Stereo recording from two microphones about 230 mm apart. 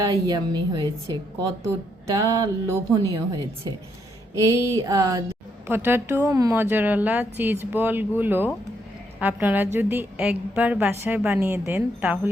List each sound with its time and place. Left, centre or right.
0.0 s a woman's voice: centre
4.4 s a woman's voice: centre